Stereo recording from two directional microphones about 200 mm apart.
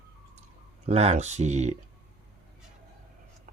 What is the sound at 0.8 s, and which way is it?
Speech, 30° right (ahead or behind).